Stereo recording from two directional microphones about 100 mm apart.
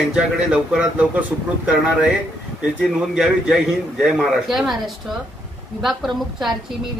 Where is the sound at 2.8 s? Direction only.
5° right (ahead or behind).